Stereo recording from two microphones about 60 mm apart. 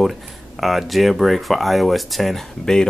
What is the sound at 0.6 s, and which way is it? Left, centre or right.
Speech, centre.